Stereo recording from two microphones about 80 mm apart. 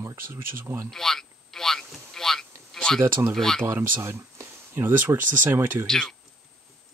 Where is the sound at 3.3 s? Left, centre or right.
Centre.